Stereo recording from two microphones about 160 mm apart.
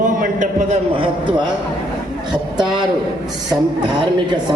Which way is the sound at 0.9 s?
30° right (ahead or behind).